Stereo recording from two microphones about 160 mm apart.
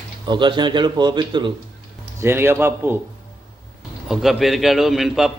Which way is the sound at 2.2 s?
15° right (ahead or behind).